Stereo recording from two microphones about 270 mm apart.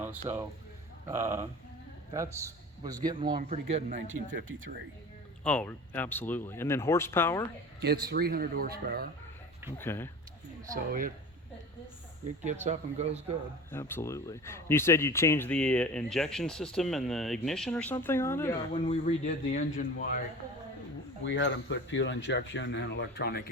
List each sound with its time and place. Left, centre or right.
0.0 s a man's voice: centre; by 4.2 s right
5.4 s speech: centre
7.8 s speech: right
9.7 s speech: centre
10.8 s speech: right
12.5 s speech: right
13.7 s speech: centre
18.9 s speech: left
21.2 s speech: left